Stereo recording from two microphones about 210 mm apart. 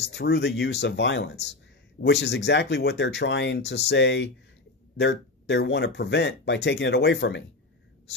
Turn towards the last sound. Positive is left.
turn(degrees=55)  # may be behind; listen again after turning